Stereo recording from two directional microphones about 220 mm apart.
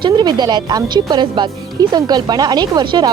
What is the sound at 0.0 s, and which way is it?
Speech, 20° right (ahead or behind).